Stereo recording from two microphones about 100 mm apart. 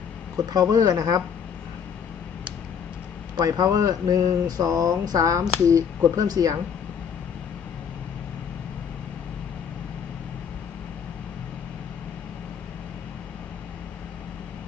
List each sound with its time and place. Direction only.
0.3 s speech: 40° right (ahead or behind)
3.3 s speech: 40° right (ahead or behind)